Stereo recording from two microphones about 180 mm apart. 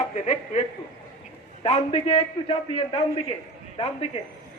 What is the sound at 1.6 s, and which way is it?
A man's voice, 35° left (ahead or behind).